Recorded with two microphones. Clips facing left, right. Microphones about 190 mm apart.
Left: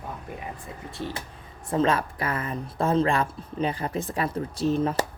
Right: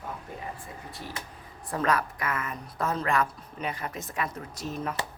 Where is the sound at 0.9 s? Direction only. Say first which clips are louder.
Left 8 dB; 25° left (ahead or behind).